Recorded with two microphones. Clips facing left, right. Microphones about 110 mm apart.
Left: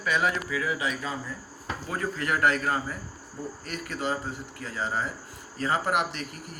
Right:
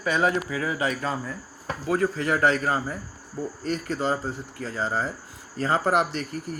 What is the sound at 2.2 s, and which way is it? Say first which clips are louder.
Speech: left 1 dB; 30° right (ahead or behind).